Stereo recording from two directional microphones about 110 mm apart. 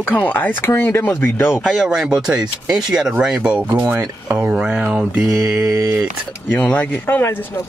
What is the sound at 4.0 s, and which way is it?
Speech, 15° right (ahead or behind).